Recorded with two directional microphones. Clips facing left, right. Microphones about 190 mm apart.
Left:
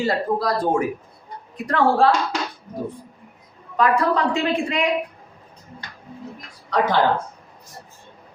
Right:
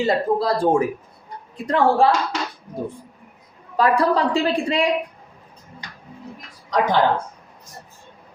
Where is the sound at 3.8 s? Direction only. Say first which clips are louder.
Right 1 dB; 35° right (ahead or behind).